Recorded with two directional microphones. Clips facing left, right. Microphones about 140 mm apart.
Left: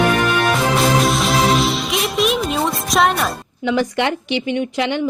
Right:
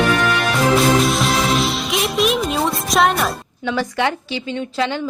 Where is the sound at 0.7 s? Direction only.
Centre (ahead or behind).